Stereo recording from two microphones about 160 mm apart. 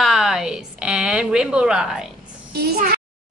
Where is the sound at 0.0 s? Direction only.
Centre (ahead or behind).